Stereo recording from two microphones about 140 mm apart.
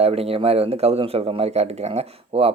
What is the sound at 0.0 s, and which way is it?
A man's voice, 45° right (ahead or behind).